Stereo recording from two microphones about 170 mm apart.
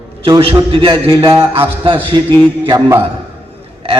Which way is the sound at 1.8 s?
30° right (ahead or behind).